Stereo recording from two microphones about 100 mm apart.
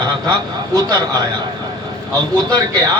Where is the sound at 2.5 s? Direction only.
35° right (ahead or behind).